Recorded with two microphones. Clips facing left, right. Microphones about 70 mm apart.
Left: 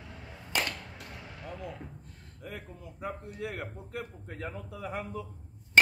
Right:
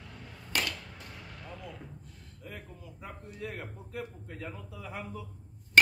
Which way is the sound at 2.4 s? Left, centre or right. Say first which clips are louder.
Left 3 dB; left.